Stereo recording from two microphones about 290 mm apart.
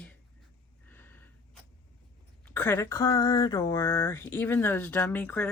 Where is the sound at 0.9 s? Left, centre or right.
Centre.